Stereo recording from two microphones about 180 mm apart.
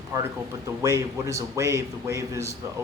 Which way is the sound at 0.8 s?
15° right (ahead or behind).